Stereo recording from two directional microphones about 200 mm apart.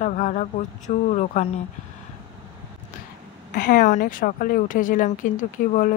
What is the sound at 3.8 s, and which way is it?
Speech, 40° left (ahead or behind).